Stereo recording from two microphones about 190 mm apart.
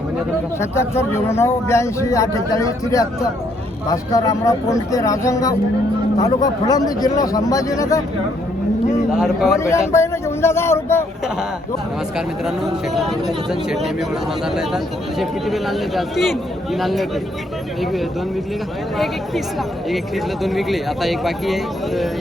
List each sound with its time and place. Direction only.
0.6 s speech: 15° left (ahead or behind)
9.1 s speech: 5° right (ahead or behind)
9.6 s speech: 15° left (ahead or behind)
12.1 s speech: centre (ahead or behind)
20.4 s speech: centre (ahead or behind)